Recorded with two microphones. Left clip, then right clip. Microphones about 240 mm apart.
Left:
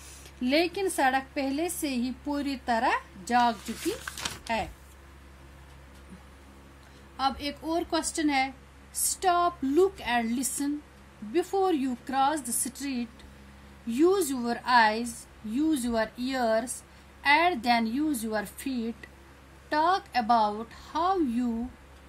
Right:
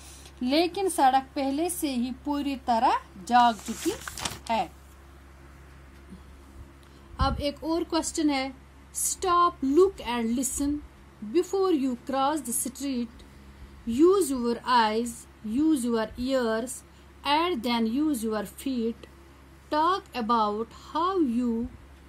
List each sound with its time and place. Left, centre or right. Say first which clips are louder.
0.4 s a woman's voice: right 1 dB; centre
3.6 s speech: right 2 dB; right
7.2 s a woman's voice: right 1 dB; centre
19.8 s a woman's voice: left 1 dB; centre